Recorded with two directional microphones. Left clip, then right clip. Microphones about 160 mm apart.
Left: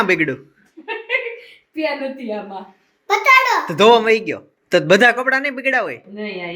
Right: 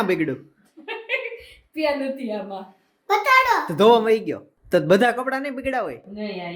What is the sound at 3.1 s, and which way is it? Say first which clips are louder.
Speech: left 4 dB; 40° right (ahead or behind).